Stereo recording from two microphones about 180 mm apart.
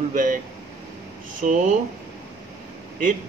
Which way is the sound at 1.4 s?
45° right (ahead or behind).